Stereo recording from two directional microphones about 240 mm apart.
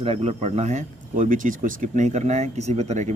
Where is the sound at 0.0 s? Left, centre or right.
Right.